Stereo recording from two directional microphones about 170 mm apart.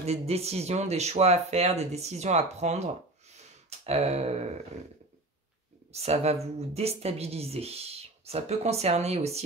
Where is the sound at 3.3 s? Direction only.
40° right (ahead or behind).